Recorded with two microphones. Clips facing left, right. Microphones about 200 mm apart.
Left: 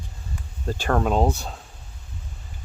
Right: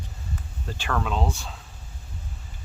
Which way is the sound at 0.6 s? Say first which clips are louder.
Left 7 dB; 40° left (ahead or behind).